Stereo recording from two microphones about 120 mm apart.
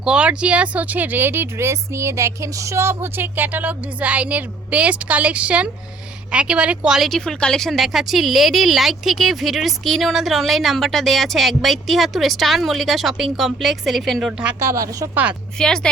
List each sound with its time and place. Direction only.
0.0 s speech: 10° right (ahead or behind)
14.6 s speech: 25° right (ahead or behind)
15.1 s speech: 10° right (ahead or behind)
15.5 s speech: 5° left (ahead or behind)